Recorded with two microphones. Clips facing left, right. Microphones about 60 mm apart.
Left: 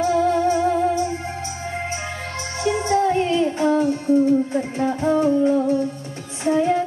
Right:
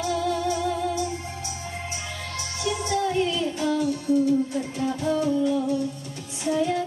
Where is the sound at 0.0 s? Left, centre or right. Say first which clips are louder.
Left 7 dB; left.